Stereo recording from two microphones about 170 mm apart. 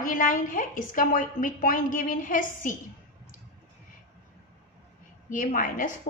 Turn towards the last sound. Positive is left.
turn(degrees=50)  # may be behind; listen again after turning